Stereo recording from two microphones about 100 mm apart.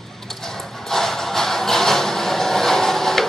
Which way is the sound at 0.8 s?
5° left (ahead or behind).